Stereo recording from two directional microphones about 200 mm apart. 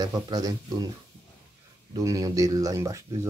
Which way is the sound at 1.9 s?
15° right (ahead or behind).